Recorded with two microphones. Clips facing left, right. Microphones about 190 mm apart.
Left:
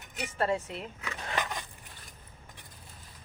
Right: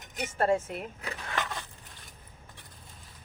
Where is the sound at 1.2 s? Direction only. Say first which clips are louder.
Left 1 dB; 15° left (ahead or behind).